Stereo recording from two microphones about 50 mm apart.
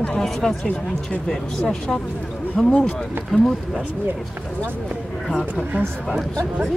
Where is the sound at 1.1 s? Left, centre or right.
Centre.